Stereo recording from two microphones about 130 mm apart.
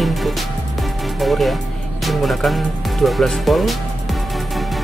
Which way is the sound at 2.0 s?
Centre (ahead or behind).